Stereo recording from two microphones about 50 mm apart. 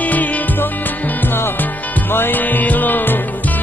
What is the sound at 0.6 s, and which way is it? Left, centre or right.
Music, left.